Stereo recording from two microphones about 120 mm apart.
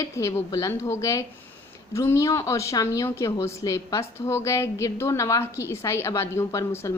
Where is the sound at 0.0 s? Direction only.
25° left (ahead or behind).